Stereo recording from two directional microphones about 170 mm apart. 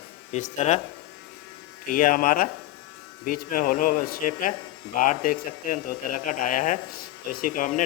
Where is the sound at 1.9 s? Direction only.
55° left (ahead or behind).